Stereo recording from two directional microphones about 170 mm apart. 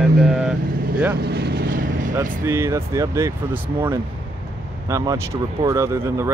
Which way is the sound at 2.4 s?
15° right (ahead or behind).